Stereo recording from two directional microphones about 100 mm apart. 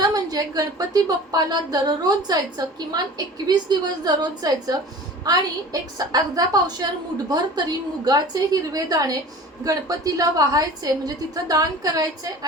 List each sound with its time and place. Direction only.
0.0 s a woman's voice: 40° right (ahead or behind)